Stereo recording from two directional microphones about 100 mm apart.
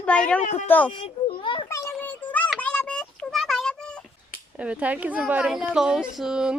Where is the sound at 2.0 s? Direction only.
15° left (ahead or behind).